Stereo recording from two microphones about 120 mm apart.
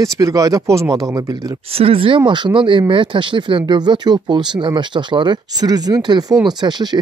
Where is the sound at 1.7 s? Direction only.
55° right (ahead or behind); by 6.9 s 35° right (ahead or behind).